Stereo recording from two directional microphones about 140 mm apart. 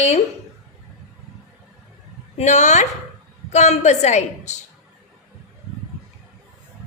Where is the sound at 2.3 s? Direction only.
55° left (ahead or behind).